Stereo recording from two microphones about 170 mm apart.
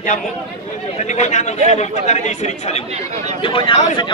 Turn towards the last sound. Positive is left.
turn(degrees=30)  # may be behind; listen again after turning